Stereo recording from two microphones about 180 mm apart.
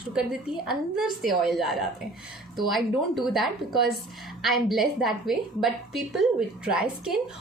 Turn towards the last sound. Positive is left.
turn(degrees=-5)  # may be behind; listen again after turning